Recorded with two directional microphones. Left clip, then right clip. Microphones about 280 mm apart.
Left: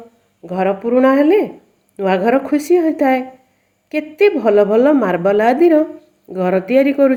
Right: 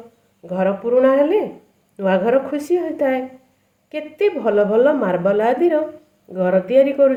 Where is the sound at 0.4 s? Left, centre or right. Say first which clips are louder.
Left 2 dB; left.